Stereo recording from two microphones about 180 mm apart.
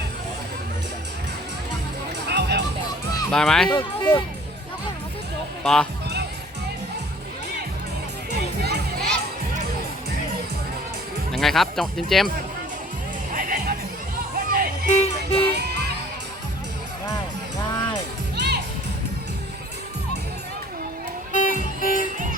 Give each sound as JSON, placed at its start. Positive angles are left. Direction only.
{"t": 2.2, "sound": "music", "side_deg": -65}
{"t": 3.3, "sound": "speech", "side_deg": 5}
{"t": 3.7, "sound": "speech", "side_deg": 25}
{"t": 5.6, "sound": "speech", "side_deg": 5}
{"t": 8.3, "sound": "music", "side_deg": -65}
{"t": 11.3, "sound": "speech", "side_deg": 0}
{"t": 13.3, "sound": "music", "side_deg": -50}
{"t": 14.8, "sound": "music", "side_deg": 40}
{"t": 15.4, "sound": "music", "side_deg": -65}
{"t": 18.3, "sound": "music", "side_deg": -70}
{"t": 21.3, "sound": "music", "side_deg": 45}